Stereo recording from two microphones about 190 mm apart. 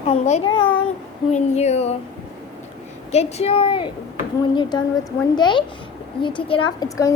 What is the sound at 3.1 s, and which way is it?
A child's voice, 30° left (ahead or behind).